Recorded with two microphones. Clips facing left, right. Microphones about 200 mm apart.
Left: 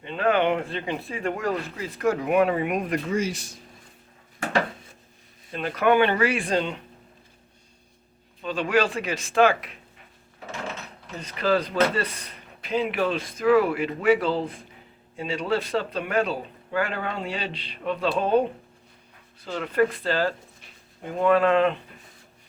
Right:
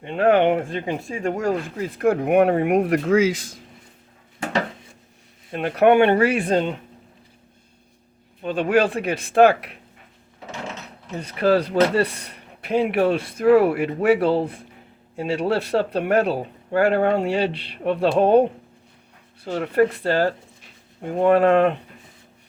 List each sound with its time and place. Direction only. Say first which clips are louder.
0.0 s speech: right 5 dB; 60° right (ahead or behind); by 3.6 s 90° right
5.5 s speech: right 5 dB; 60° right (ahead or behind)
8.4 s speech: right 4 dB; 55° right (ahead or behind)
11.3 s speech: right 5 dB; 60° right (ahead or behind)
19.6 s speech: right 4 dB; 65° right (ahead or behind)